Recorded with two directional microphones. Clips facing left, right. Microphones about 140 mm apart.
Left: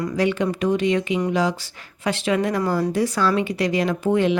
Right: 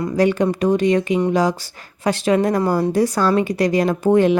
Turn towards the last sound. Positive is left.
turn(degrees=-45)  # may be behind; listen again after turning